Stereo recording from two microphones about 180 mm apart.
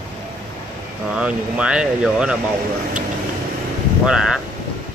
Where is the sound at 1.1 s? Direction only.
5° right (ahead or behind).